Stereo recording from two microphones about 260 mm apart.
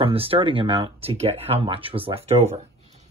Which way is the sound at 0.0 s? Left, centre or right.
Right.